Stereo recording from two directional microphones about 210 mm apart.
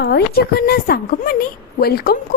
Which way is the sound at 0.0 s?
50° left (ahead or behind).